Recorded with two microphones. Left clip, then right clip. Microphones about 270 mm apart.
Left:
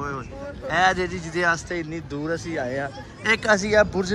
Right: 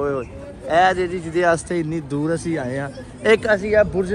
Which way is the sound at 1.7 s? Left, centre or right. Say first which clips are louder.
Right 6 dB; centre.